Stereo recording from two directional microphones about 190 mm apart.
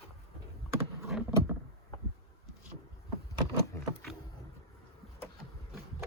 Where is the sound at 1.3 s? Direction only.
15° right (ahead or behind).